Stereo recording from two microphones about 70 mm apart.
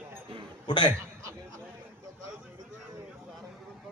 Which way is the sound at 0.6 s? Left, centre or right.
Left.